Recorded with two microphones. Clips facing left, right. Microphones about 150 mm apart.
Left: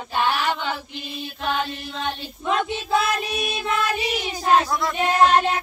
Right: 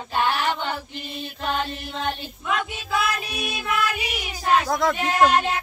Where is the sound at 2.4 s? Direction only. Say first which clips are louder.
Left 4 dB; 30° left (ahead or behind).